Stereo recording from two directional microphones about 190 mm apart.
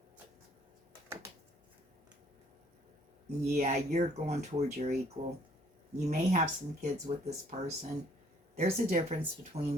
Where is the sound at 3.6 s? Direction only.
35° right (ahead or behind).